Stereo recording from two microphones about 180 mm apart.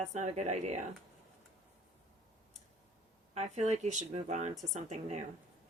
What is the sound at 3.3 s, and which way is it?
Speech, 35° right (ahead or behind).